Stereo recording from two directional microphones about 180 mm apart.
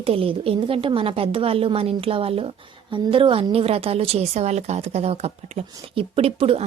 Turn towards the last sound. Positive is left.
turn(degrees=-35)  # may be behind; listen again after turning